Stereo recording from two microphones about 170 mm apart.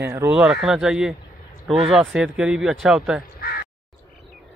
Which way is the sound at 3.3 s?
60° left (ahead or behind).